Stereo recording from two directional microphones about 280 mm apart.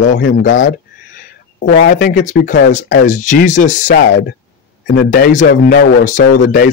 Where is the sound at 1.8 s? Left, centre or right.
Left.